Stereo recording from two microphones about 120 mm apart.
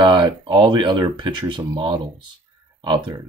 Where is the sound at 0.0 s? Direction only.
40° right (ahead or behind).